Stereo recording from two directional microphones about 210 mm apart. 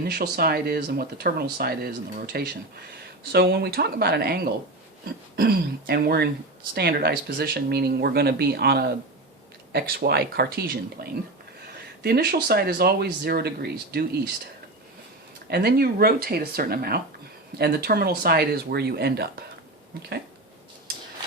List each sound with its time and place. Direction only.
0.1 s speech: 45° right (ahead or behind)
15.4 s speech: 50° right (ahead or behind)